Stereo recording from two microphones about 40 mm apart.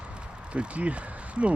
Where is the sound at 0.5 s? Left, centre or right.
Right.